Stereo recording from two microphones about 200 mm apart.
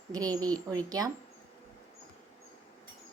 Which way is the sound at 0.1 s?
20° right (ahead or behind).